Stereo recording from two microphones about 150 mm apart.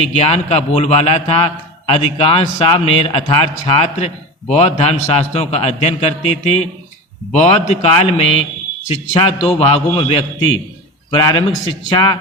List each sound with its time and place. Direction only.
0.0 s a man's voice: 45° left (ahead or behind)